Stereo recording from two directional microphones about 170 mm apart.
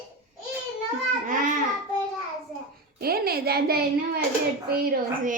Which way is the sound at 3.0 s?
65° right (ahead or behind).